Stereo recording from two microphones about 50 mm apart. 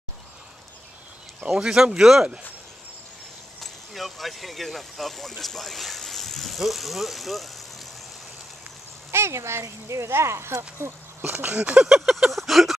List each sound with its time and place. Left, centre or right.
1.5 s speech: centre
3.6 s speech: centre
9.1 s speech: right
10.8 s speech: right
11.4 s speech: right
11.8 s a sound: centre